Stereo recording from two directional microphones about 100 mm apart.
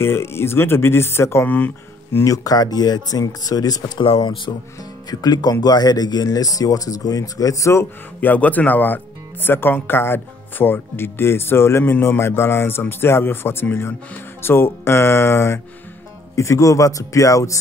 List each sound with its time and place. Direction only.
0.0 s speech: 25° left (ahead or behind)
2.1 s speech: 35° left (ahead or behind)
8.2 s speech: 15° left (ahead or behind); by 17.6 s 35° left (ahead or behind)